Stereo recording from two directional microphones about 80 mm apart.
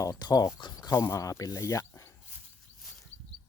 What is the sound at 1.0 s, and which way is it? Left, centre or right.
Speech, left.